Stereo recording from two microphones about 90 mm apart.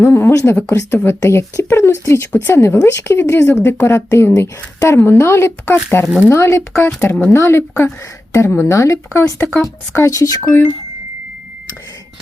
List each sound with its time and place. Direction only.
0.0 s speech: 25° left (ahead or behind)
9.4 s speech: 15° left (ahead or behind)
9.6 s speech: 35° left (ahead or behind)